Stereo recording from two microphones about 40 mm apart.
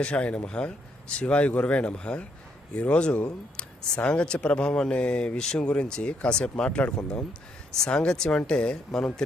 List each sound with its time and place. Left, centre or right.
0.0 s speech: left
6.7 s speech: left
7.9 s speech: left